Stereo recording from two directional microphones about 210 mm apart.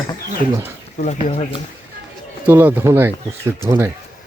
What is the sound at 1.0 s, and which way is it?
Speech, 35° left (ahead or behind).